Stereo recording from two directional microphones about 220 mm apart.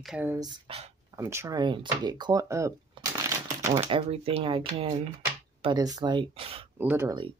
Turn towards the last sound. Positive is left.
turn(degrees=-15)  # may be behind; listen again after turning